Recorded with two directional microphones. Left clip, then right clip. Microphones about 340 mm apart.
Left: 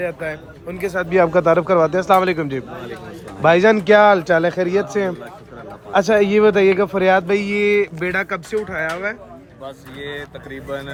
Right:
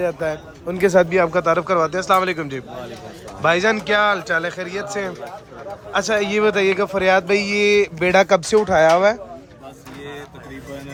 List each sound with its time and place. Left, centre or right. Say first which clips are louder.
0.0 s a man's voice: right 3 dB; centre
0.8 s speech: right 8 dB; right
1.1 s a man's voice: left 3 dB; centre